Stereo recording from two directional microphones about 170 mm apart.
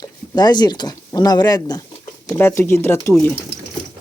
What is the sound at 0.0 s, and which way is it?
Speech, 25° left (ahead or behind).